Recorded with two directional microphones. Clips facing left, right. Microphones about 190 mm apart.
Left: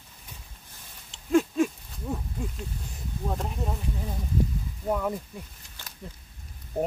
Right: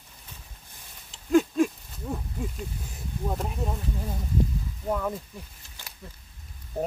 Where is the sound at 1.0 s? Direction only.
Centre (ahead or behind).